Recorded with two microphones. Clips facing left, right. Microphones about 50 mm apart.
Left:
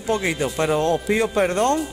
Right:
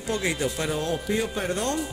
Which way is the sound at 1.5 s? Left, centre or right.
Left.